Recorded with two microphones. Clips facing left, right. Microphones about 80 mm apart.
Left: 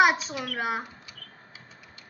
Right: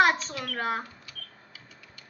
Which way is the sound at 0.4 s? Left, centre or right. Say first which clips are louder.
Even; centre.